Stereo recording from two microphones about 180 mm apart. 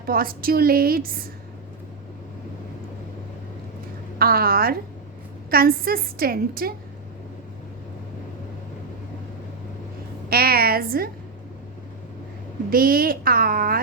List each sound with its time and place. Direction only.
0.0 s a woman's voice: 55° right (ahead or behind)
4.2 s a woman's voice: 55° right (ahead or behind)
10.2 s a woman's voice: 60° right (ahead or behind)
12.7 s a woman's voice: 55° right (ahead or behind)